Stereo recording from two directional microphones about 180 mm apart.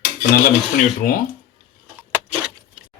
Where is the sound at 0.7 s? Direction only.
50° left (ahead or behind).